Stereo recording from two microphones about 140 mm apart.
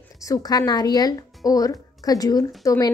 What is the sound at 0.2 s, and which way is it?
A woman's voice, 25° left (ahead or behind).